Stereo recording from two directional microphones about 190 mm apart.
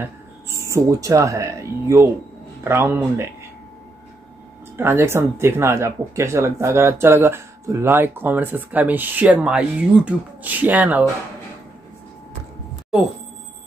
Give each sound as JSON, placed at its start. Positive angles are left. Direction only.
{"t": 0.0, "sound": "speech", "side_deg": -15}
{"t": 4.7, "sound": "speech", "side_deg": -10}